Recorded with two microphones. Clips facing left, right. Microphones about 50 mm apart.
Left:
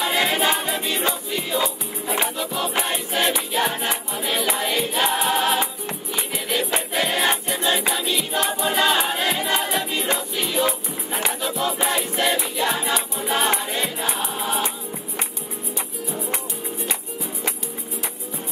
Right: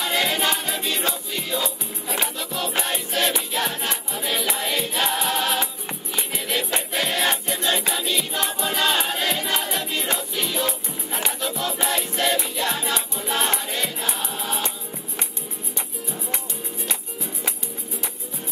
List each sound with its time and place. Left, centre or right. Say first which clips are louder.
0.0 s music: left 2 dB; centre
4.1 s music: left 1 dB; centre